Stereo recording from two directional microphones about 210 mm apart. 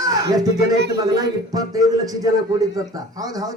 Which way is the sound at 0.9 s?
15° right (ahead or behind).